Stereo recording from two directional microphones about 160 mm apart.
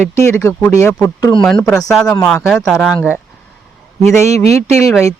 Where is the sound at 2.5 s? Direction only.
Centre (ahead or behind).